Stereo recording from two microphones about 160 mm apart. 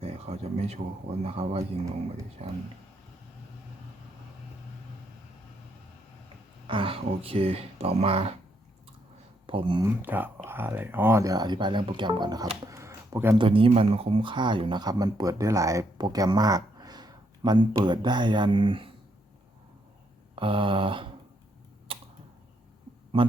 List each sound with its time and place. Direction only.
0.0 s a sound: 40° right (ahead or behind)
1.2 s speech: 40° right (ahead or behind)
6.7 s speech: 35° right (ahead or behind)
9.5 s speech: 35° right (ahead or behind)
9.8 s speech: 10° right (ahead or behind)
13.4 s speech: 35° right (ahead or behind)
20.3 s speech: 30° right (ahead or behind)
21.9 s typing: 35° right (ahead or behind)